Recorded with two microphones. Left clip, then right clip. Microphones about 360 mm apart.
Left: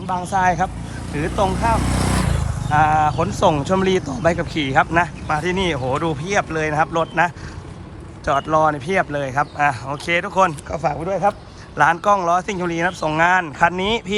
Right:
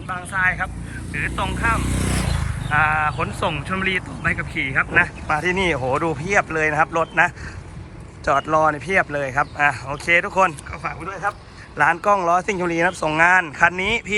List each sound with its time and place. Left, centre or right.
0.3 s speech: centre
1.9 s vehicle: left
2.6 s speech: centre